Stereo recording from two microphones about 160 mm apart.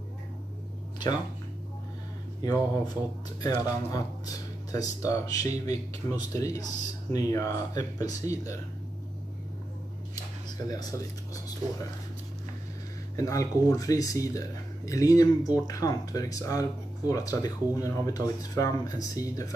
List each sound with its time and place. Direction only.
2.4 s speech: 25° left (ahead or behind)
13.1 s speech: 20° left (ahead or behind)